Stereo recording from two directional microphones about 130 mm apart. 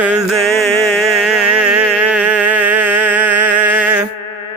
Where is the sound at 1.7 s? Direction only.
10° right (ahead or behind).